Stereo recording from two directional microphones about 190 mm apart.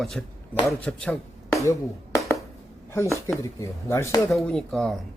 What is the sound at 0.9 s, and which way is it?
Speech, 15° left (ahead or behind).